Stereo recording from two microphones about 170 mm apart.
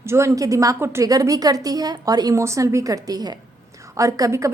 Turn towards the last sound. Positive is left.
turn(degrees=-20)  # may be behind; listen again after turning